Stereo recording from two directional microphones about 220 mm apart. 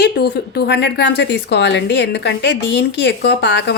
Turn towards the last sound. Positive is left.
turn(degrees=50)  # may be behind; listen again after turning